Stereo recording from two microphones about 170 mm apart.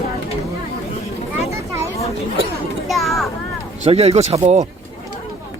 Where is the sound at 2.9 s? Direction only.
Centre (ahead or behind).